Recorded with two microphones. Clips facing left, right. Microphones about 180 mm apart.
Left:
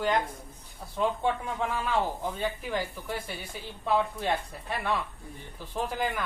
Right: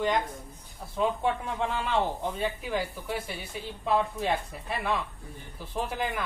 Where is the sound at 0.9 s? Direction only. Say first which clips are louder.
Even; centre (ahead or behind).